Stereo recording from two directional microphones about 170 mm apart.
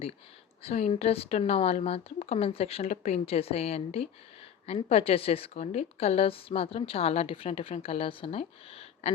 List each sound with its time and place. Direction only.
0.6 s a woman's voice: 40° left (ahead or behind)